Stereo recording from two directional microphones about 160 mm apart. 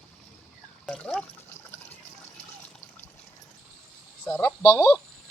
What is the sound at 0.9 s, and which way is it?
Speech, 5° left (ahead or behind).